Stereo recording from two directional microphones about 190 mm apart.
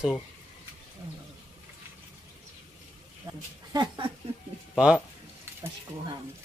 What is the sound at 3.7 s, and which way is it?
Speech, 25° right (ahead or behind).